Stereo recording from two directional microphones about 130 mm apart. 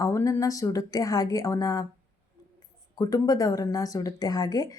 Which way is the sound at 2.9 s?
30° left (ahead or behind).